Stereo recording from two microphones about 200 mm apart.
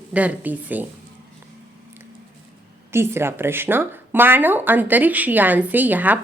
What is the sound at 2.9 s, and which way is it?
Speech, 10° right (ahead or behind).